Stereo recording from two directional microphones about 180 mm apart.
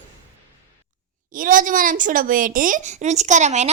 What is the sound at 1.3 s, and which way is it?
Speech, 50° right (ahead or behind).